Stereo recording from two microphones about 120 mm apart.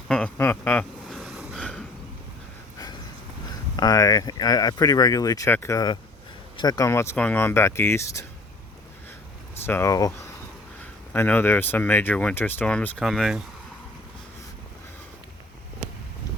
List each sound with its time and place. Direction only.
0.1 s a sound: 5° left (ahead or behind)
0.6 s speech: 10° left (ahead or behind)
1.1 s a sound: centre (ahead or behind)
3.8 s speech: 30° left (ahead or behind)
9.6 s speech: 20° left (ahead or behind)
11.1 s speech: 15° left (ahead or behind)
13.0 s speech: centre (ahead or behind)